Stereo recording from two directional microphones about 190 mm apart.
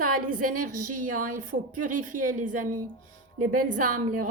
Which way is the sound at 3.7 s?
45° right (ahead or behind).